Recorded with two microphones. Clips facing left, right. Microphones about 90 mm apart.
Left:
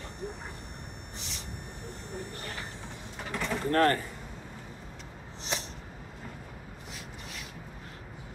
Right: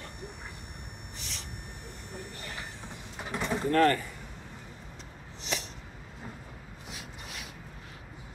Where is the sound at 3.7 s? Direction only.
35° left (ahead or behind).